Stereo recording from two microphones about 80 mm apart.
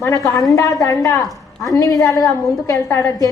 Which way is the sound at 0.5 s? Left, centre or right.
Left.